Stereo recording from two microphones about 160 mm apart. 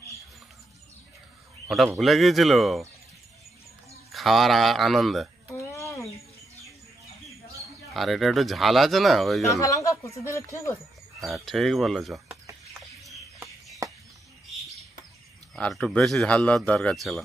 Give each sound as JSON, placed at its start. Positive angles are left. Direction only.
{"t": 2.0, "sound": "a man's voice", "side_deg": 0}
{"t": 4.1, "sound": "a man's voice", "side_deg": 0}
{"t": 5.5, "sound": "a sound", "side_deg": 20}
{"t": 7.9, "sound": "a man's voice", "side_deg": 0}
{"t": 9.5, "sound": "speech", "side_deg": 20}
{"t": 11.1, "sound": "a man's voice", "side_deg": 0}
{"t": 13.0, "sound": "bird", "side_deg": 0}
{"t": 15.5, "sound": "a man's voice", "side_deg": 5}